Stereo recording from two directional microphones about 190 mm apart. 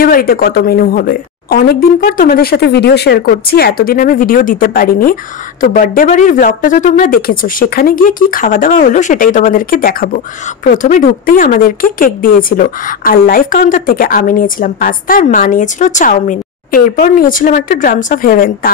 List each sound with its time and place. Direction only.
0.0 s speech: 50° left (ahead or behind)